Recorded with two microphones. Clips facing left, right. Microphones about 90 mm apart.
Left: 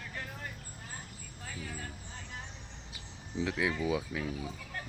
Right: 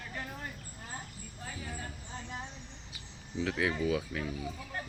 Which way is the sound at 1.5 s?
20° right (ahead or behind).